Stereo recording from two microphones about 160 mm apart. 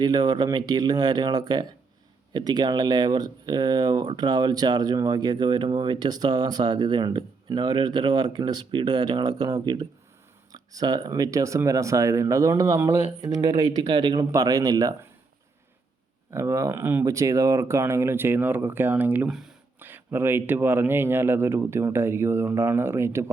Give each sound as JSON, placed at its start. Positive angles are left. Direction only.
{"t": 0.0, "sound": "speech", "side_deg": -25}
{"t": 16.3, "sound": "speech", "side_deg": -20}